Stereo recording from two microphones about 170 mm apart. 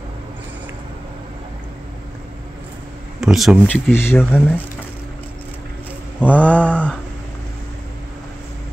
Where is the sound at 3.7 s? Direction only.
15° left (ahead or behind).